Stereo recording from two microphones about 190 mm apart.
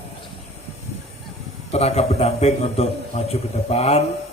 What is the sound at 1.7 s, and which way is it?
A man's voice, 35° left (ahead or behind).